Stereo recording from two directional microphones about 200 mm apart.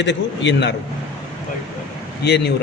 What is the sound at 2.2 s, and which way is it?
Speech, 55° left (ahead or behind).